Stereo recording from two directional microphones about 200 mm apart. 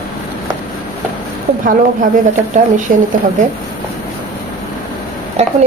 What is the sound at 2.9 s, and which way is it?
Speech, 40° right (ahead or behind).